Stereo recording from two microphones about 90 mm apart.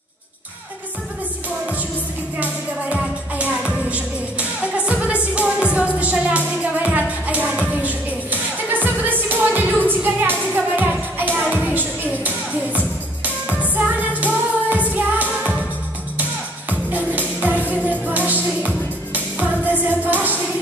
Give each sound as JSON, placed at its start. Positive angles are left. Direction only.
{"t": 2.3, "sound": "music", "side_deg": -10}
{"t": 17.6, "sound": "music", "side_deg": -20}